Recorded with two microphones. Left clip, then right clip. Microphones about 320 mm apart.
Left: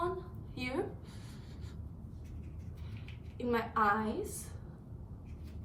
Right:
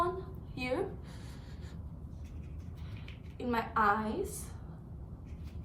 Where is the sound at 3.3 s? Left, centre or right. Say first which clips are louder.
Right 1 dB; centre.